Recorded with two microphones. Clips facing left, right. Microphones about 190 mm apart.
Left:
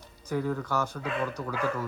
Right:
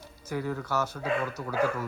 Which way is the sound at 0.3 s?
5° right (ahead or behind).